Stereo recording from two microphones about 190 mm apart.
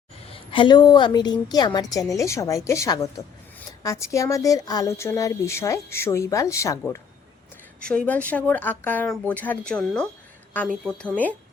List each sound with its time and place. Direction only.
0.3 s a woman's voice: 25° left (ahead or behind); by 11.1 s 5° left (ahead or behind)